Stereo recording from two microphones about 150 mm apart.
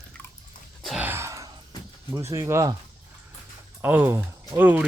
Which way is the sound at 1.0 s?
15° right (ahead or behind).